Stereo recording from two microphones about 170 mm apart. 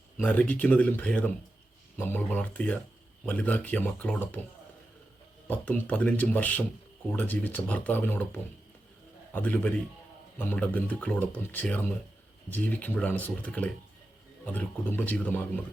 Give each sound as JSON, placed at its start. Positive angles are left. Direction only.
{"t": 0.2, "sound": "speech", "side_deg": 10}
{"t": 5.5, "sound": "speech", "side_deg": 10}